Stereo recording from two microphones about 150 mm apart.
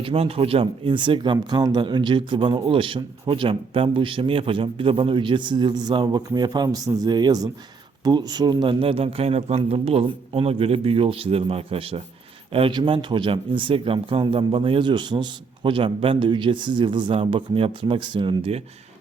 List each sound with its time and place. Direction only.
0.0 s speech: 40° right (ahead or behind)